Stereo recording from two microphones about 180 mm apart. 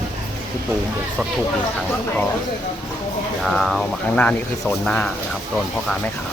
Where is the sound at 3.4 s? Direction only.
Centre (ahead or behind).